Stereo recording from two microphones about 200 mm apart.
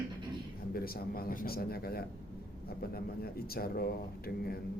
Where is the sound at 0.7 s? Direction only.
50° left (ahead or behind).